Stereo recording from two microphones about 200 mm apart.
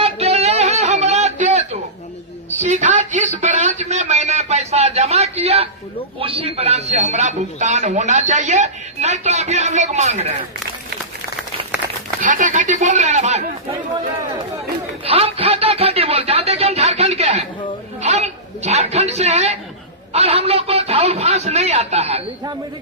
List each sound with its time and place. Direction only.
0.0 s a sound: 30° right (ahead or behind)
6.1 s speech: 30° right (ahead or behind)
12.2 s speech: 40° right (ahead or behind)
15.0 s speech: 30° right (ahead or behind)